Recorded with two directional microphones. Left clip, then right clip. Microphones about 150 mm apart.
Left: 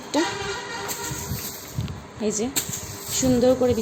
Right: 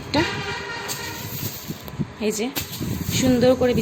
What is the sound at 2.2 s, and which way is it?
Speech, centre (ahead or behind).